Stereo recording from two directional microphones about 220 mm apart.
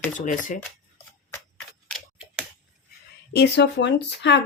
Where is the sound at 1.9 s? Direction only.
5° right (ahead or behind).